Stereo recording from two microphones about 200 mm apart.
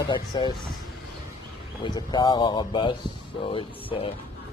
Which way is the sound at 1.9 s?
20° left (ahead or behind).